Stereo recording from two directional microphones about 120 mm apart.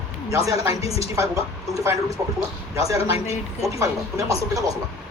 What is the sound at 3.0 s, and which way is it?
Speech, 55° left (ahead or behind).